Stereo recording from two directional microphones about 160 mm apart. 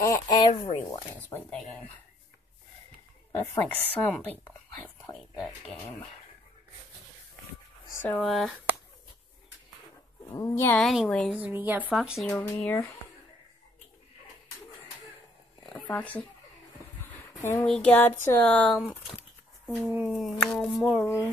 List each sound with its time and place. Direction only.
0.0 s speech: 25° left (ahead or behind)
1.1 s speech: 10° left (ahead or behind)
3.3 s speech: 15° left (ahead or behind)
5.3 s speech: centre (ahead or behind)
7.9 s a sound: 15° left (ahead or behind)
8.2 s a sound: centre (ahead or behind)
10.3 s speech: 15° left (ahead or behind)
11.3 s speech: 10° right (ahead or behind)
15.6 s speech: 10° left (ahead or behind)
17.2 s a sound: 15° left (ahead or behind)
17.6 s speech: 5° left (ahead or behind)
18.8 s a sound: 5° right (ahead or behind)
20.8 s speech: 15° left (ahead or behind)